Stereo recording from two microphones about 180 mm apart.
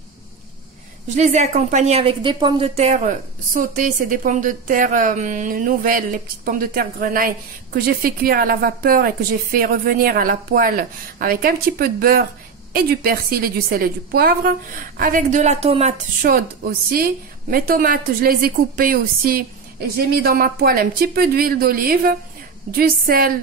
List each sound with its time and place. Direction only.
1.0 s a woman's voice: 40° right (ahead or behind)
16.2 s a woman's voice: 55° right (ahead or behind)